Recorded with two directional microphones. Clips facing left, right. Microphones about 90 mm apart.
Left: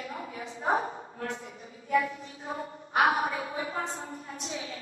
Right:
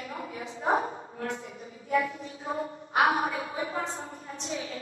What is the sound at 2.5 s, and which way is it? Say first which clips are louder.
A woman's voice: right 1 dB; 35° right (ahead or behind).